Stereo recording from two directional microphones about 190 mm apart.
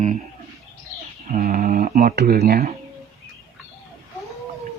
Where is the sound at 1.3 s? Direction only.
50° right (ahead or behind).